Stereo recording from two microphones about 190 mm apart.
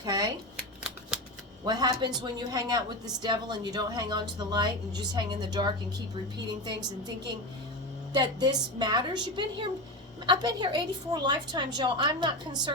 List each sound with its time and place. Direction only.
0.0 s speech: 20° right (ahead or behind)
1.6 s speech: 20° right (ahead or behind)
8.1 s speech: 20° right (ahead or behind)